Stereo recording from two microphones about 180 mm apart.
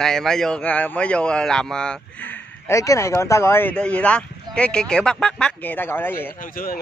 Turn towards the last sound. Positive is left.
turn(degrees=55)  # may be behind; listen again after turning